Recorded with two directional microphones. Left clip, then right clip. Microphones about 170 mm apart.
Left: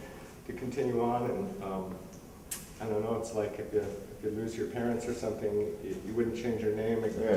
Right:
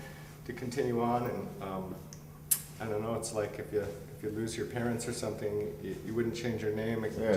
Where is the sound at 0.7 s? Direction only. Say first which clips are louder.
Left 1 dB; 30° right (ahead or behind).